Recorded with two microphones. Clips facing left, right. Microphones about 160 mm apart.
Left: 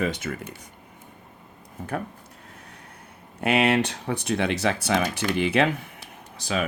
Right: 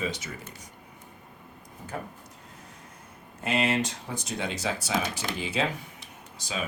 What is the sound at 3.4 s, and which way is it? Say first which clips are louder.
Speech: left 6 dB; 65° left (ahead or behind).